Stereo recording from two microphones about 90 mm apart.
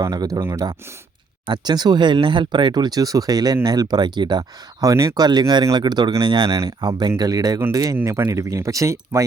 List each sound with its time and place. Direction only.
0.0 s speech: 45° right (ahead or behind)
1.5 s speech: 50° right (ahead or behind)
6.5 s speech: 35° right (ahead or behind)